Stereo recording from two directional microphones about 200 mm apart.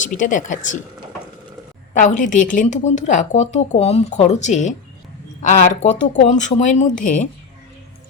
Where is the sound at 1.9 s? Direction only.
40° left (ahead or behind).